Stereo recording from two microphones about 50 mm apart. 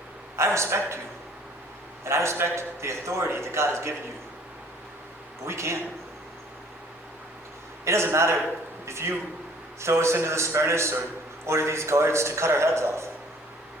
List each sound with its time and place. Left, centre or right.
0.3 s a man's voice: right
2.0 s a man's voice: right
5.5 s a man's voice: right
7.9 s a man's voice: right